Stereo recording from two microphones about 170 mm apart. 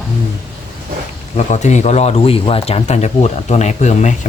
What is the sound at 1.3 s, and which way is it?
Speech, 45° left (ahead or behind).